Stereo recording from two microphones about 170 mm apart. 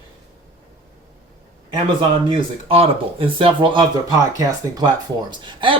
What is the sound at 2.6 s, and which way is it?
Speech, 35° right (ahead or behind).